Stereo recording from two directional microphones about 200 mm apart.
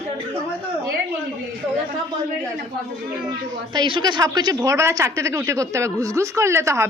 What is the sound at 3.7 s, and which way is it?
A woman's voice, 20° right (ahead or behind).